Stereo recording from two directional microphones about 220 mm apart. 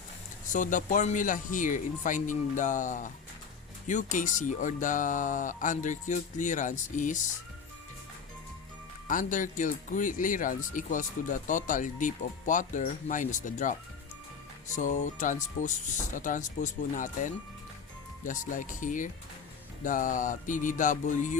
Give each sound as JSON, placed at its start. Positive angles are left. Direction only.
{"t": 0.5, "sound": "speech", "side_deg": 35}
{"t": 9.0, "sound": "speech", "side_deg": 35}
{"t": 14.8, "sound": "speech", "side_deg": 35}